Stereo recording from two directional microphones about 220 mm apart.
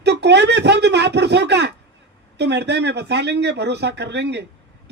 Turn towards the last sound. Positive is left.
turn(degrees=-50)  # may be behind; listen again after turning